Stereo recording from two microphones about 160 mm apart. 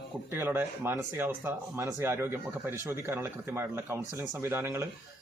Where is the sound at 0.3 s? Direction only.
15° right (ahead or behind).